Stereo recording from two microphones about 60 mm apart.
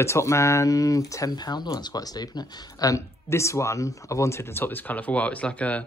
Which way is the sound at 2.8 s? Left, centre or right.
Left.